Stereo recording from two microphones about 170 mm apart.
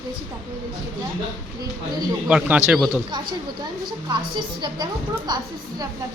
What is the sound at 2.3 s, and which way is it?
Speech, 5° right (ahead or behind).